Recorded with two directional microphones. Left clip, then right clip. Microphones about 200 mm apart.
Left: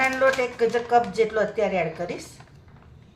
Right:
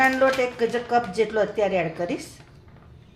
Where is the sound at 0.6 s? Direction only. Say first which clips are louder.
Left 2 dB; 30° right (ahead or behind).